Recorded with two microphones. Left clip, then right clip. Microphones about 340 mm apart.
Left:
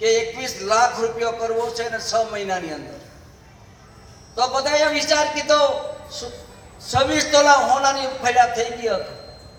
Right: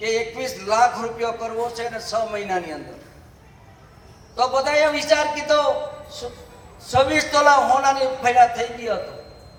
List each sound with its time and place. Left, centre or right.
0.0 s a man's voice: right
4.4 s a man's voice: right
6.9 s a man's voice: right